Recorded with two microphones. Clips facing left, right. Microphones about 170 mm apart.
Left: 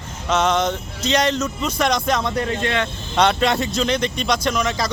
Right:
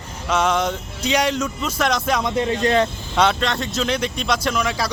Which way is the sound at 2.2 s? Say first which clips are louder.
Right 2 dB; 20° right (ahead or behind).